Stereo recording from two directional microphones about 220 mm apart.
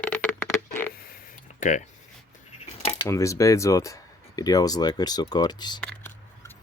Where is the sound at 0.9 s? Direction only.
40° left (ahead or behind).